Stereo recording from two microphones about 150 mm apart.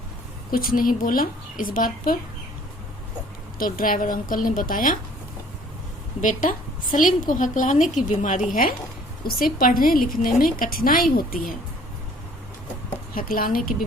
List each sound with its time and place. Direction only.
0.5 s a woman's voice: 75° left (ahead or behind)
3.6 s a woman's voice: 70° left (ahead or behind)
6.2 s a woman's voice: 60° left (ahead or behind)
9.2 s a woman's voice: 80° left
13.1 s a woman's voice: 70° left (ahead or behind)